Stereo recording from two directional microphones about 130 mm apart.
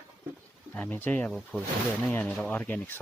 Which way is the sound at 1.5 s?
15° right (ahead or behind).